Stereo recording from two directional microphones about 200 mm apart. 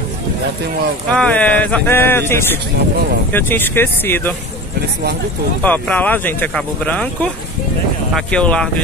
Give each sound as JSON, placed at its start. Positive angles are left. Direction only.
{"t": 1.1, "sound": "speech", "side_deg": 5}
{"t": 5.6, "sound": "speech", "side_deg": 5}